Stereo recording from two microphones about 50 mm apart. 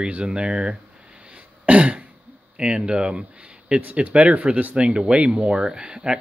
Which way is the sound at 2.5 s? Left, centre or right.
Right.